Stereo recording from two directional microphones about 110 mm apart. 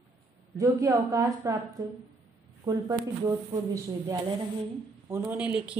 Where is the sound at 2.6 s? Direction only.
35° right (ahead or behind).